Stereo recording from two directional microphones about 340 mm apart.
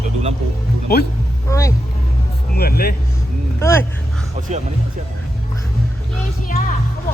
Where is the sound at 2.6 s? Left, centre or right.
Left.